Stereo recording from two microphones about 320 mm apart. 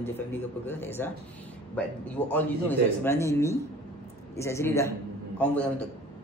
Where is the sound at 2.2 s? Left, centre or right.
Centre.